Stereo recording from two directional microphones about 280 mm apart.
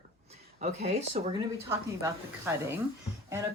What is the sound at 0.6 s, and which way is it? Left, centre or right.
Speech, right.